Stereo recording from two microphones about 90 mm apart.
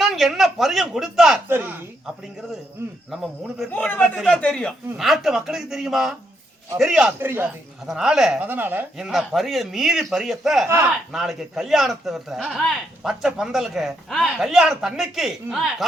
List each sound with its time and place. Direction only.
0.0 s a man's voice: centre (ahead or behind)
1.5 s a woman's voice: 25° right (ahead or behind)
3.7 s a man's voice: 15° left (ahead or behind)
4.9 s a man's voice: 5° right (ahead or behind)
7.2 s a woman's voice: 25° right (ahead or behind)
7.9 s a man's voice: 5° right (ahead or behind)
8.4 s a woman's voice: 20° right (ahead or behind)
9.0 s a man's voice: 5° right (ahead or behind)
10.7 s a woman's voice: 25° right (ahead or behind)
11.1 s a man's voice: 5° right (ahead or behind)